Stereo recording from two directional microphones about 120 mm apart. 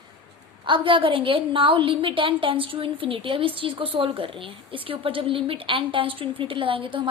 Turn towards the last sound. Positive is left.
turn(degrees=-50)  # may be behind; listen again after turning